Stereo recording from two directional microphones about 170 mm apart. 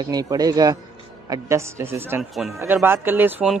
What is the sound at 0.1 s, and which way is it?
Speech, 20° right (ahead or behind).